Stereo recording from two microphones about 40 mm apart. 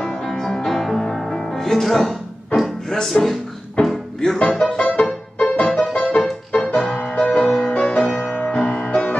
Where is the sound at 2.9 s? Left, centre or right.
Centre.